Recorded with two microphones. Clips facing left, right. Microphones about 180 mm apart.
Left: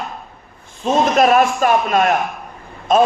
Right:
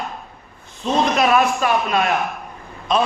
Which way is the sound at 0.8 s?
45° left (ahead or behind).